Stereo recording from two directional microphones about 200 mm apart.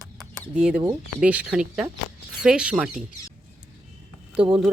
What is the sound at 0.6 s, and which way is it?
Speech, 5° right (ahead or behind).